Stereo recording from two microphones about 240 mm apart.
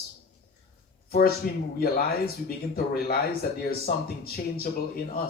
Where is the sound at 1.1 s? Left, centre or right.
Left.